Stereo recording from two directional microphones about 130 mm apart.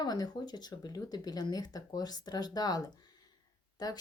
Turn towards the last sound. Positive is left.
turn(degrees=30)  # may be behind; listen again after turning